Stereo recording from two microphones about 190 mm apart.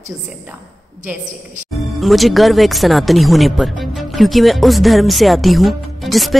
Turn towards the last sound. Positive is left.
turn(degrees=0)  # may be behind; listen again after turning